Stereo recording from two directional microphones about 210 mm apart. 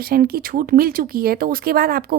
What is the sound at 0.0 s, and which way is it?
A woman's voice, 45° right (ahead or behind).